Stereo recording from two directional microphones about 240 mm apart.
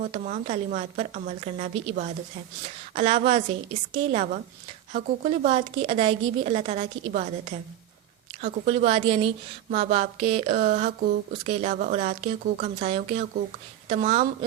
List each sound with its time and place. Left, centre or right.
0.0 s speech: right